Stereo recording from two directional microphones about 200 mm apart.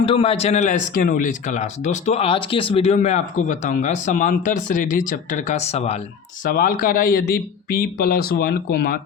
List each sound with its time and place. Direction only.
0.0 s speech: 25° left (ahead or behind)
6.4 s speech: 45° left (ahead or behind)